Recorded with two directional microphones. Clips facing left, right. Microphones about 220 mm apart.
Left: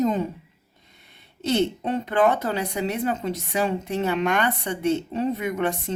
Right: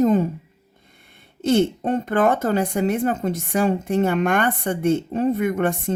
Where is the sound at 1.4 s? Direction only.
50° right (ahead or behind).